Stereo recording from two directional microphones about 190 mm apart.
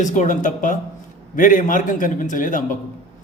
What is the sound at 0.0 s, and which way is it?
A man's voice, 40° left (ahead or behind).